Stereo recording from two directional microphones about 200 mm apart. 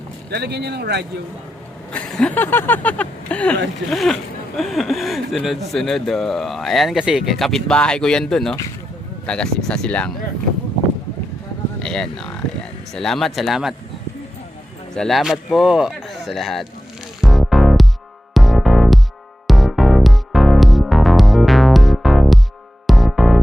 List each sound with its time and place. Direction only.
0.3 s speech: 55° right (ahead or behind)
1.9 s speech: 5° left (ahead or behind)
11.8 s speech: 5° left (ahead or behind)
14.9 s speech: centre (ahead or behind)
17.2 s music: centre (ahead or behind)